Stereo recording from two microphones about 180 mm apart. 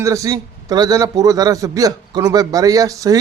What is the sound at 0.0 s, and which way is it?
A man's voice, 15° right (ahead or behind).